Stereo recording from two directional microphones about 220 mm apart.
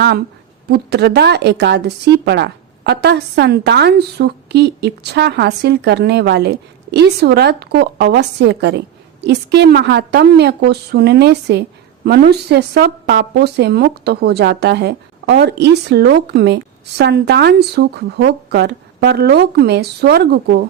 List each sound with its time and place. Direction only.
0.7 s a woman's voice: 50° right (ahead or behind)